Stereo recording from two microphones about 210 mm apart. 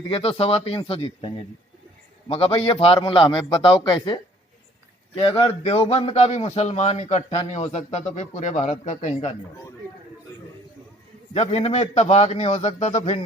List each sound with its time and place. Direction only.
0.1 s a man's voice: 25° left (ahead or behind)
5.2 s a man's voice: 25° left (ahead or behind)
11.3 s a man's voice: 30° left (ahead or behind)